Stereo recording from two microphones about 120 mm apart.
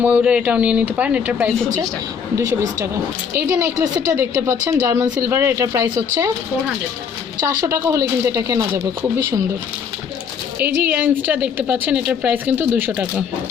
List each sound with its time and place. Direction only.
0.0 s a woman's voice: 10° right (ahead or behind)
2.3 s a woman's voice: 30° right (ahead or behind)
7.6 s a woman's voice: 25° right (ahead or behind)
10.6 s a woman's voice: 15° right (ahead or behind)